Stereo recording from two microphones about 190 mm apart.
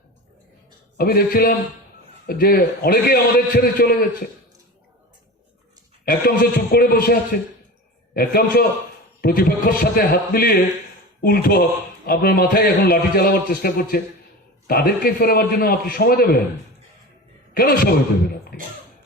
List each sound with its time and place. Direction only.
0.9 s a man's voice: 55° left (ahead or behind)
6.1 s a man's voice: 50° left (ahead or behind)
17.5 s a man's voice: 50° left (ahead or behind)